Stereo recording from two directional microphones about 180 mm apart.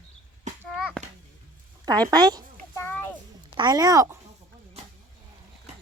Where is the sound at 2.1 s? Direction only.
20° right (ahead or behind).